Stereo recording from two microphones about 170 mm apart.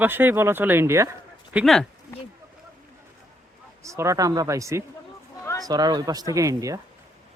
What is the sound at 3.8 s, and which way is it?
Speech, 20° right (ahead or behind).